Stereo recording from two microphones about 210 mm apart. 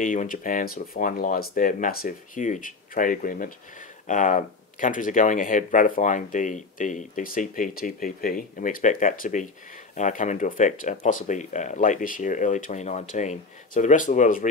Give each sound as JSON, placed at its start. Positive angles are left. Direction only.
{"t": 0.0, "sound": "speech", "side_deg": 40}